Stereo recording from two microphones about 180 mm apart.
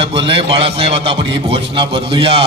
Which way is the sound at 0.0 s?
30° right (ahead or behind).